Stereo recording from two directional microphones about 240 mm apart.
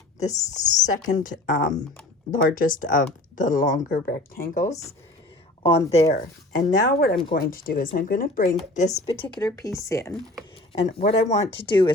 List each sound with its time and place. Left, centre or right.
0.6 s speech: left
5.9 s speech: left
9.1 s speech: centre
10.7 s speech: left